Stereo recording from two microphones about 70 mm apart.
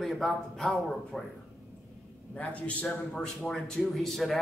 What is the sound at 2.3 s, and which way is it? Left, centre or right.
Speech, centre.